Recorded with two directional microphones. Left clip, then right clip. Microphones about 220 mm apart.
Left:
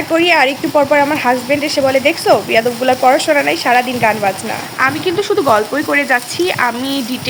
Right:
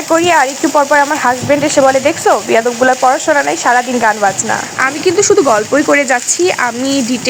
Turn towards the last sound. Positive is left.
turn(degrees=-20)  # may be behind; listen again after turning